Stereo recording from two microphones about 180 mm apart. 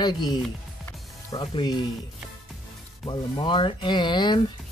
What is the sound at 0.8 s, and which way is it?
Music, 25° left (ahead or behind).